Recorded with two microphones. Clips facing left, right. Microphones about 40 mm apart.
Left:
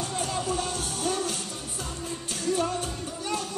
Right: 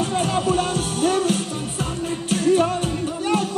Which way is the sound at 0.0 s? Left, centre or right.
Right.